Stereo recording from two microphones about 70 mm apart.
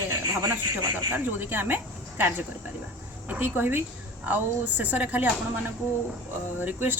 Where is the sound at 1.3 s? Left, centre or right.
Right.